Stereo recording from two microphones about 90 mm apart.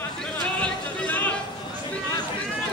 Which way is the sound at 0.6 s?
20° left (ahead or behind).